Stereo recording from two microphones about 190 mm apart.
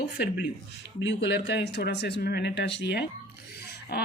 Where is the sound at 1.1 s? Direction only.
65° left (ahead or behind).